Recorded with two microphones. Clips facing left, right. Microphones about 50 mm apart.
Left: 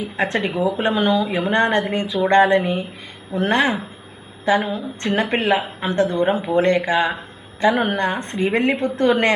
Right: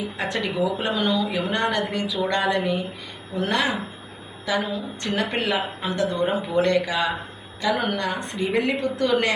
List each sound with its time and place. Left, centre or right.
0.2 s a woman's voice: left